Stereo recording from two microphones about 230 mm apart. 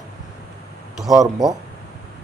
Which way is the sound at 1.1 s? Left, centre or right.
Centre.